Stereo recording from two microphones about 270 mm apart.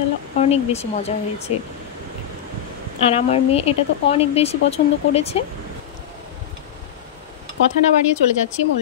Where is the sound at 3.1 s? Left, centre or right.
Left.